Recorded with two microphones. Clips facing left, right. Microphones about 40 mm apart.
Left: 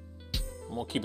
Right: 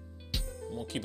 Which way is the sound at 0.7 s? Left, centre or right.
Left.